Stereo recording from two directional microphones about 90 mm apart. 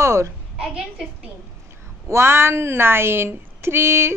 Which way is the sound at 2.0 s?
30° right (ahead or behind).